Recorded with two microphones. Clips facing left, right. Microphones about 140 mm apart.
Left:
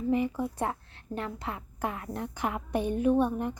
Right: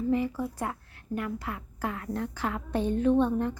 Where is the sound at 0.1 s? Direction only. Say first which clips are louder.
Left 2 dB; 20° left (ahead or behind).